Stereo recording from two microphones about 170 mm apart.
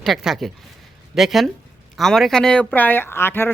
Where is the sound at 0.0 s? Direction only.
Centre (ahead or behind).